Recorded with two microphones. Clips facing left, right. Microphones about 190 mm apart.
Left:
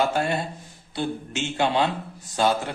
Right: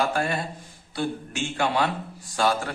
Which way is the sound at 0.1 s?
25° left (ahead or behind).